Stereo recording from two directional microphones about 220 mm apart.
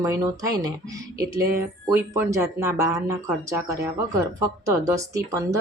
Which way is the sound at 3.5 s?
15° right (ahead or behind).